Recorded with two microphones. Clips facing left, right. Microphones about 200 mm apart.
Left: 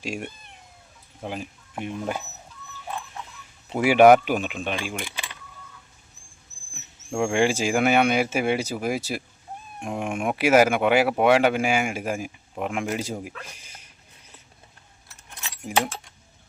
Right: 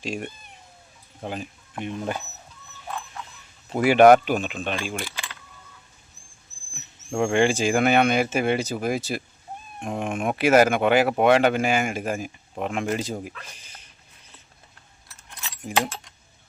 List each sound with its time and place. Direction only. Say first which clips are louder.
1.2 s speech: even; 5° left (ahead or behind)
3.7 s speech: even; 10° left (ahead or behind)
4.9 s keys jangling: right 1 dB; 20° left (ahead or behind)
7.1 s speech: right 1 dB; 5° left (ahead or behind)
15.4 s keys jangling: even; 10° left (ahead or behind)